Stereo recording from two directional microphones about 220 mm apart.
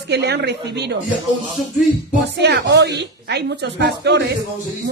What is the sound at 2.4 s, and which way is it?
A man's voice, 50° right (ahead or behind).